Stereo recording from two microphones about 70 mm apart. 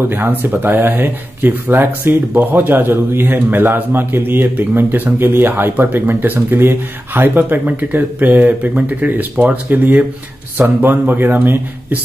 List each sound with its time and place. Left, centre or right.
0.1 s speech: right